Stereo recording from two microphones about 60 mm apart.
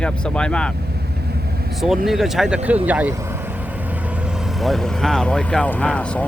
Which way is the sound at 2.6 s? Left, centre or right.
Right.